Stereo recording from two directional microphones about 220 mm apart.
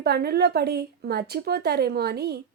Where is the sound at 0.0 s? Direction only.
45° right (ahead or behind).